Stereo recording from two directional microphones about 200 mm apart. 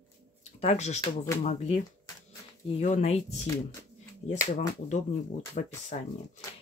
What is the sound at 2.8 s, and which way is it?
Speech, 35° left (ahead or behind).